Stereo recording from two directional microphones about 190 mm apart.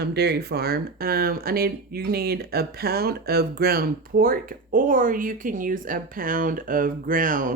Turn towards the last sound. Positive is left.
turn(degrees=-45)  # may be behind; listen again after turning